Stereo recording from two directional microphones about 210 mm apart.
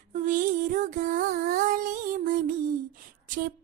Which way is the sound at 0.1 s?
40° right (ahead or behind).